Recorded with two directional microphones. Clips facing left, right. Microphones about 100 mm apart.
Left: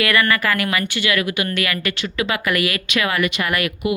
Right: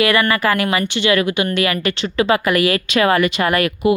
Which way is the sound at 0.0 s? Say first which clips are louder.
Right 3 dB; 25° right (ahead or behind).